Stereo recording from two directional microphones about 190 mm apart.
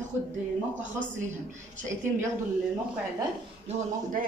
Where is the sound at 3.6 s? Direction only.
35° right (ahead or behind).